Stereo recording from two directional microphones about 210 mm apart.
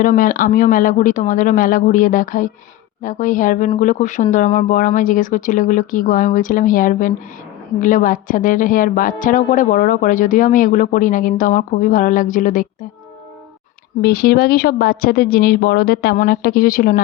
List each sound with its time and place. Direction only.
0.0 s a woman's voice: 40° left (ahead or behind)
14.0 s speech: 50° left (ahead or behind)